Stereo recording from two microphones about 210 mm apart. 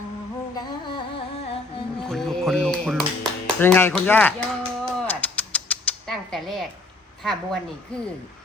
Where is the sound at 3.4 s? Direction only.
10° left (ahead or behind).